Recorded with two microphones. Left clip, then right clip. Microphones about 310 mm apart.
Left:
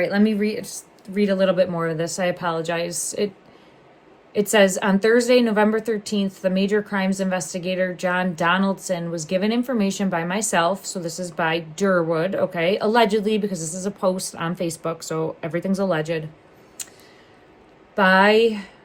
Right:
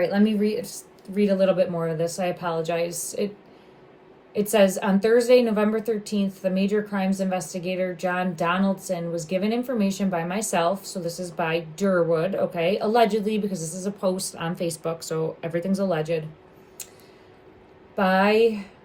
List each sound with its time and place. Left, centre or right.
0.0 s a woman's voice: left
4.4 s a woman's voice: left
17.9 s a woman's voice: left